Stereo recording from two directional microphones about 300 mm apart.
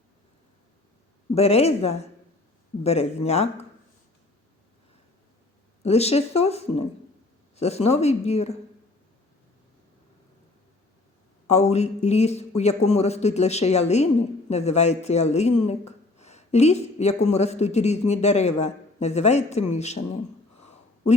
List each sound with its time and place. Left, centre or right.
1.4 s speech: left
5.8 s speech: left
11.4 s speech: left